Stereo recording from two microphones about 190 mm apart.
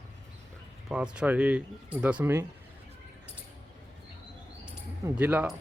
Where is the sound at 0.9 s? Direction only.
5° right (ahead or behind).